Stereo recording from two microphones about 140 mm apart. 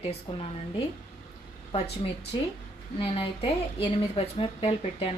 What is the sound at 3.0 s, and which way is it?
Speech, 45° left (ahead or behind).